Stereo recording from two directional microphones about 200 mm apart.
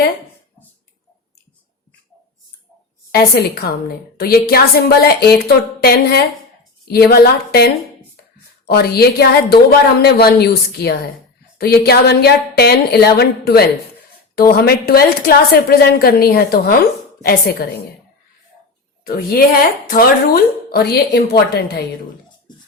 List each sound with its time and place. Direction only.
3.1 s a woman's voice: 50° left (ahead or behind)
19.0 s a woman's voice: 50° left (ahead or behind)